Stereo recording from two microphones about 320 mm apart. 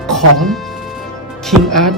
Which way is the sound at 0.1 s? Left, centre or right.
Centre.